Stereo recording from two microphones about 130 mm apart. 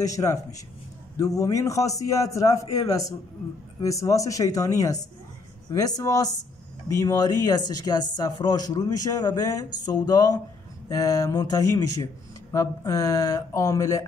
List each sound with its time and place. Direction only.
0.0 s speech: 25° left (ahead or behind)